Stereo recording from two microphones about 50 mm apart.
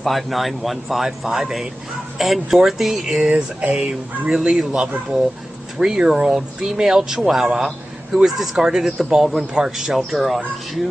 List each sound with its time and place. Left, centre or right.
0.0 s a man's voice: centre
3.3 s speech: right
4.3 s a man's voice: centre